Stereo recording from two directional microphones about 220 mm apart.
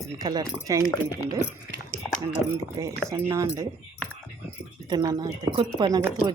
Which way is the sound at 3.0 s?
15° right (ahead or behind).